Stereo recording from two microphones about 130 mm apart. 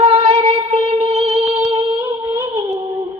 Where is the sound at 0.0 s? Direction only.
45° right (ahead or behind).